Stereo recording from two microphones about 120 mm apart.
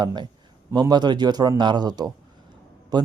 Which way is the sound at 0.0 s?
35° right (ahead or behind).